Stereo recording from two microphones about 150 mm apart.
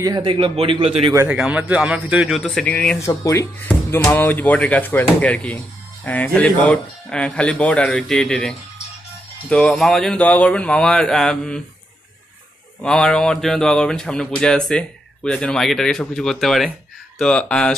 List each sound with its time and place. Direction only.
0.0 s a man's voice: 30° right (ahead or behind)
1.3 s speech: 10° right (ahead or behind); by 3.0 s 10° left (ahead or behind)
3.1 s speech: 20° left (ahead or behind); by 11.6 s 5° left (ahead or behind)
12.8 s speech: 5° left (ahead or behind)